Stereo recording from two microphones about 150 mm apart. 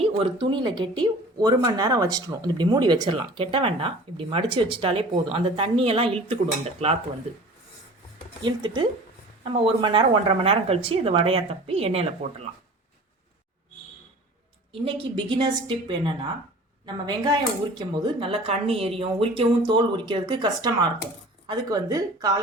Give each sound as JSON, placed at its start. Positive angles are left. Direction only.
{"t": 0.0, "sound": "speech", "side_deg": -35}
{"t": 8.4, "sound": "speech", "side_deg": -30}
{"t": 14.7, "sound": "speech", "side_deg": -35}